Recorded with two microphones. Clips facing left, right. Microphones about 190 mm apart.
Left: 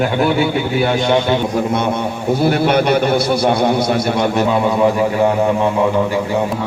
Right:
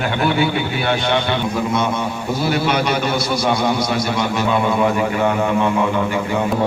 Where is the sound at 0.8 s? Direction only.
40° left (ahead or behind).